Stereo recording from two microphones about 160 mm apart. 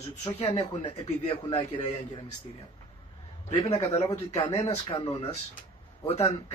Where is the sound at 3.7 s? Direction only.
25° left (ahead or behind).